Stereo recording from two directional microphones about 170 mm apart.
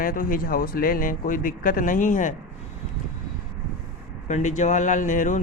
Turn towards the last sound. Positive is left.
turn(degrees=45)  # may be behind; listen again after turning